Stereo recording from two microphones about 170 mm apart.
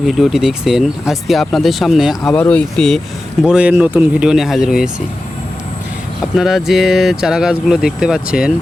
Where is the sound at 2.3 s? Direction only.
10° left (ahead or behind).